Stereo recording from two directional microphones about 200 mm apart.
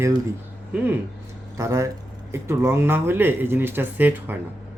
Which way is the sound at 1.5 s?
15° right (ahead or behind).